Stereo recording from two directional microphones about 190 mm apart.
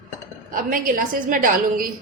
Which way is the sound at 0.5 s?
45° right (ahead or behind).